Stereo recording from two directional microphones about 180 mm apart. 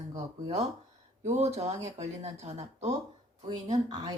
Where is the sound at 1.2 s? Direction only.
40° right (ahead or behind).